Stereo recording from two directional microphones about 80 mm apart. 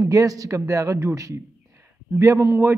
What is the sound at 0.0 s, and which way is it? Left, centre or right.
A man's voice, right.